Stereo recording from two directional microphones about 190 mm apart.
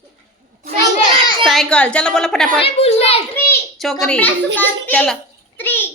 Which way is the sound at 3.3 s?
10° left (ahead or behind).